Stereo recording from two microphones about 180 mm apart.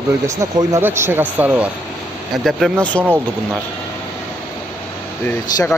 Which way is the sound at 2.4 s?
5° left (ahead or behind).